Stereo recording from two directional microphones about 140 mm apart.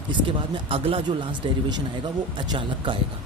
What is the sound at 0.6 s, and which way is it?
Speech, 40° right (ahead or behind).